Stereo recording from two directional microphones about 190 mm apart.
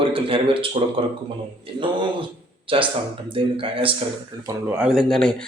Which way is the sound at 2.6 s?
25° right (ahead or behind).